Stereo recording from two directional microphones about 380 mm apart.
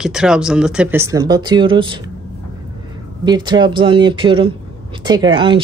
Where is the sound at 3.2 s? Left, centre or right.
Centre.